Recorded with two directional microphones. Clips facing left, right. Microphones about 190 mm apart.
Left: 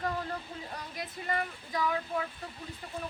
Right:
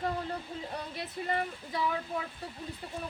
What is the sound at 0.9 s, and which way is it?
Speech, 30° right (ahead or behind).